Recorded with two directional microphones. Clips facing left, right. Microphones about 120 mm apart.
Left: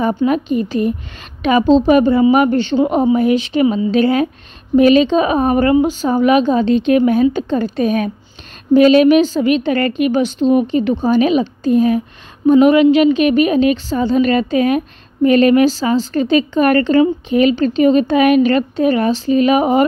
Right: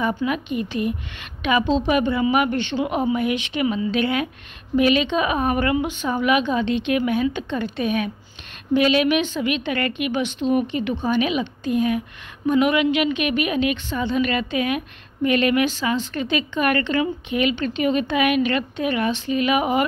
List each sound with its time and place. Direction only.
0.2 s a woman's voice: 35° left (ahead or behind)